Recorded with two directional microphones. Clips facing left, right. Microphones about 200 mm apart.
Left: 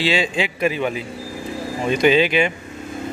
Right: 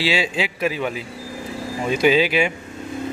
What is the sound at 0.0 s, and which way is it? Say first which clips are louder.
A man's voice: left 2 dB; 5° right (ahead or behind).